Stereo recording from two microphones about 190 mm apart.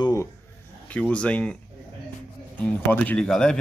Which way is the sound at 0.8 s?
5° left (ahead or behind).